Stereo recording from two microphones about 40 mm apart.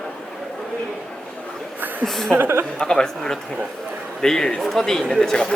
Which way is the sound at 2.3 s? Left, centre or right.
Right.